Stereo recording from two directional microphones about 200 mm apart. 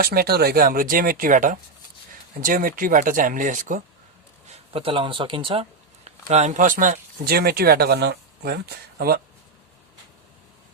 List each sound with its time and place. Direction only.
0.0 s speech: 50° right (ahead or behind)